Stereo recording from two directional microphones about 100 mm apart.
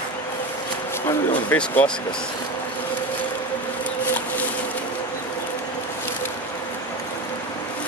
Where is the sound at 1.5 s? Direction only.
20° left (ahead or behind).